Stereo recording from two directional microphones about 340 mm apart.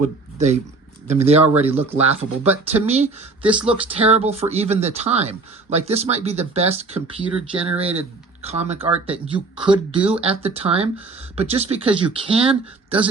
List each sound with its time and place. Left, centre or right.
0.3 s speech: centre
3.4 s speech: centre
3.7 s speech: centre